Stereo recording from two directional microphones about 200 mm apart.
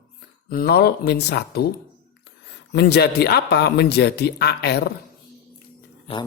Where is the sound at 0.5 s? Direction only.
55° left (ahead or behind).